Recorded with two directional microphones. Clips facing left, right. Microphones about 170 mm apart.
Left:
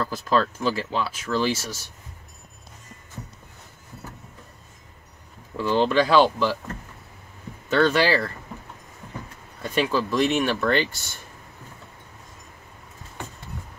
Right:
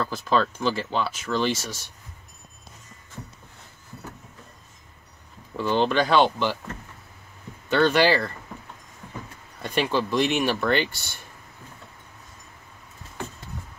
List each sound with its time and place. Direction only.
0.0 s speech: centre (ahead or behind)
5.6 s speech: centre (ahead or behind)
7.7 s speech: centre (ahead or behind)
9.6 s speech: centre (ahead or behind)